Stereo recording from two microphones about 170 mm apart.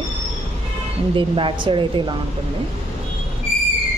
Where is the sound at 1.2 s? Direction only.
30° right (ahead or behind).